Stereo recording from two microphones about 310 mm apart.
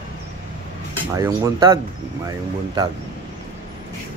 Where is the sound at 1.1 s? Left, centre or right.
Centre.